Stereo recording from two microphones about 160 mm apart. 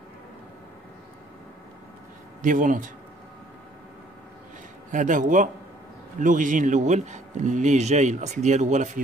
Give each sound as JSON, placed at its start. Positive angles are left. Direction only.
{"t": 2.4, "sound": "speech", "side_deg": -55}
{"t": 4.9, "sound": "speech", "side_deg": -55}